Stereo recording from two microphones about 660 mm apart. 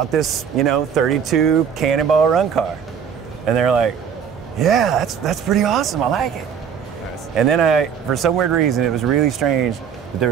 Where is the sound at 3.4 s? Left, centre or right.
Right.